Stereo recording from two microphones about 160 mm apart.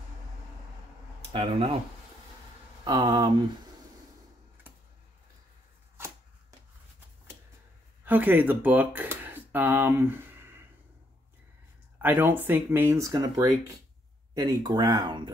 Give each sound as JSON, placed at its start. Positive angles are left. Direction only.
{"t": 1.3, "sound": "speech", "side_deg": -35}
{"t": 2.8, "sound": "speech", "side_deg": -25}
{"t": 6.0, "sound": "chopping", "side_deg": -15}
{"t": 8.0, "sound": "speech", "side_deg": -10}
{"t": 12.0, "sound": "speech", "side_deg": -10}